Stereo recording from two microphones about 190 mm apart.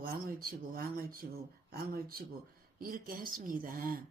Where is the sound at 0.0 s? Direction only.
50° right (ahead or behind).